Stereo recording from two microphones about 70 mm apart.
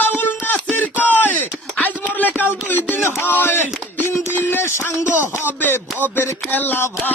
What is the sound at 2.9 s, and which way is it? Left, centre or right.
Speech, left.